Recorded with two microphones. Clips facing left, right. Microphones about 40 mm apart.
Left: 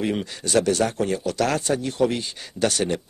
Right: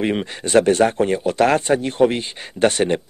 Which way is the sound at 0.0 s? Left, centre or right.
Right.